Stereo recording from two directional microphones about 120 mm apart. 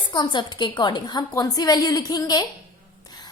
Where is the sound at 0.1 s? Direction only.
40° left (ahead or behind).